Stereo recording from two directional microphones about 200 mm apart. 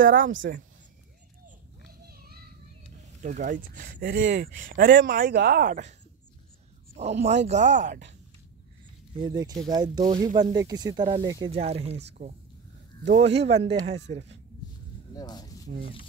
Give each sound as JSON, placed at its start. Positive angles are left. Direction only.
{"t": 0.4, "sound": "speech", "side_deg": -50}
{"t": 2.0, "sound": "children playing", "side_deg": -50}
{"t": 3.2, "sound": "speech", "side_deg": -40}
{"t": 7.0, "sound": "speech", "side_deg": -35}
{"t": 9.2, "sound": "speech", "side_deg": -20}
{"t": 13.0, "sound": "speech", "side_deg": -35}
{"t": 15.1, "sound": "speech", "side_deg": 20}